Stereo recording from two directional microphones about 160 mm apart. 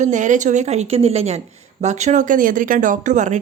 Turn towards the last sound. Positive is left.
turn(degrees=-50)  # may be behind; listen again after turning